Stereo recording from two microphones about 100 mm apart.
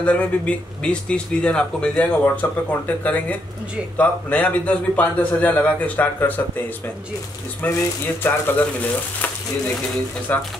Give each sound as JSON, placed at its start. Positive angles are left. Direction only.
{"t": 0.0, "sound": "speech", "side_deg": 15}
{"t": 7.6, "sound": "speech", "side_deg": 15}
{"t": 10.3, "sound": "speech", "side_deg": 15}